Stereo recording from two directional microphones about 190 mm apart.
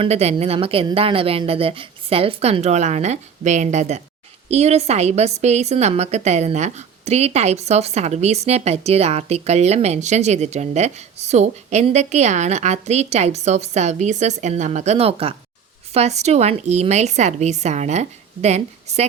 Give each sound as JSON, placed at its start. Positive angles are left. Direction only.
{"t": 0.0, "sound": "a woman's voice", "side_deg": -35}